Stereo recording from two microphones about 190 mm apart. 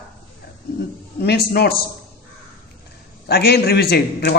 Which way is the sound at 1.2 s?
60° left (ahead or behind).